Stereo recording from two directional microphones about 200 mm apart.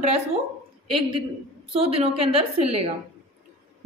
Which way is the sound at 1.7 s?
30° right (ahead or behind).